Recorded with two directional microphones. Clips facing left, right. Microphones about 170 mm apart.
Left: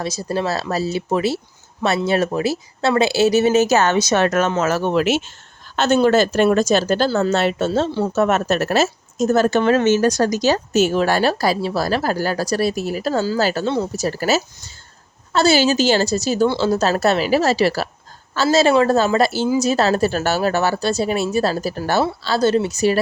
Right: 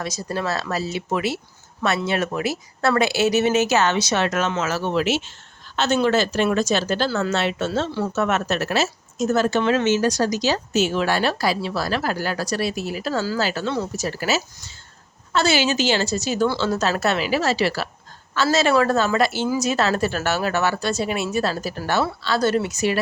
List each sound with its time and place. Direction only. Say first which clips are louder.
0.0 s a woman's voice: left 4 dB; 30° left (ahead or behind)
18.4 s a woman's voice: left 4 dB; 25° left (ahead or behind)